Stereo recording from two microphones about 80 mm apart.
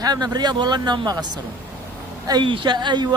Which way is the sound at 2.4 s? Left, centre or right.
Right.